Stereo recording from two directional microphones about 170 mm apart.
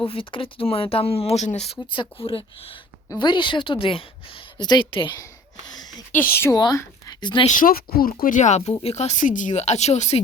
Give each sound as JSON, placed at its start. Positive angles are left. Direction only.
{"t": 0.0, "sound": "a woman's voice", "side_deg": 30}
{"t": 6.3, "sound": "speech", "side_deg": 15}
{"t": 7.4, "sound": "speech", "side_deg": 50}